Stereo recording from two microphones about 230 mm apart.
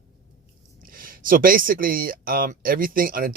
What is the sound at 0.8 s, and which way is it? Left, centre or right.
Speech, right.